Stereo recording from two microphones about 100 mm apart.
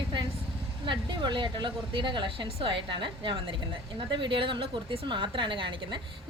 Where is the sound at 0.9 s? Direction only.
50° right (ahead or behind).